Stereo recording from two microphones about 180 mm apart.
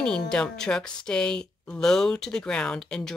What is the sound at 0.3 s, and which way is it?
Speech, 5° left (ahead or behind).